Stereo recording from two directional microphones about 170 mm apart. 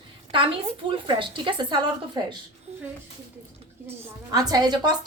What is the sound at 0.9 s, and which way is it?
Speech, 30° right (ahead or behind).